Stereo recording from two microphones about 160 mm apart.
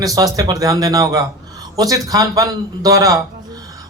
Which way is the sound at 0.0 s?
20° right (ahead or behind).